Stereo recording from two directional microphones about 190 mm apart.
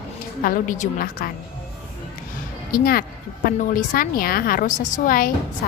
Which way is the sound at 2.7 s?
50° left (ahead or behind).